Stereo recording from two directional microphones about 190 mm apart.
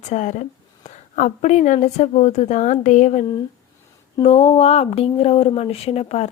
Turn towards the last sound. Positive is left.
turn(degrees=35)  # may be behind; listen again after turning